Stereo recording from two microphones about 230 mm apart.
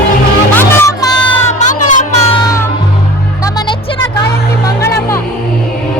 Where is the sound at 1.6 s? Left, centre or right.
Left.